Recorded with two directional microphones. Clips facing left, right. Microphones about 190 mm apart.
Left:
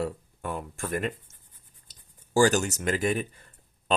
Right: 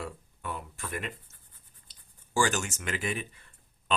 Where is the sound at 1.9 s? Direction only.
40° left (ahead or behind).